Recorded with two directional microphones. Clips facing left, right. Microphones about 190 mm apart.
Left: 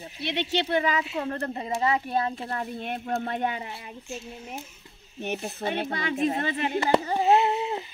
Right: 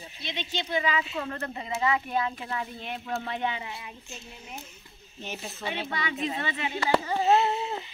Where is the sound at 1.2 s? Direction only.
30° left (ahead or behind).